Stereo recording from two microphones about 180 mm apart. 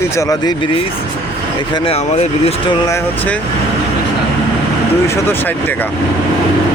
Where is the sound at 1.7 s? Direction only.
35° left (ahead or behind).